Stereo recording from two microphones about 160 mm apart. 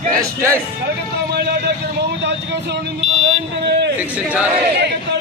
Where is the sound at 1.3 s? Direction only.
90° right.